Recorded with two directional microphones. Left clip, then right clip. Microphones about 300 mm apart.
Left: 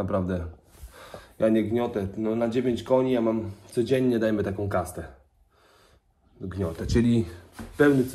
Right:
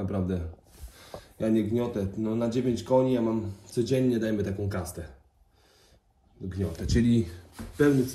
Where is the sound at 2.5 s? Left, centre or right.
Centre.